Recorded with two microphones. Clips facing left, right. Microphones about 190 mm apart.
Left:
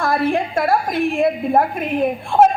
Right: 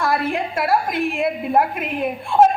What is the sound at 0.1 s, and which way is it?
A woman's voice, 30° left (ahead or behind).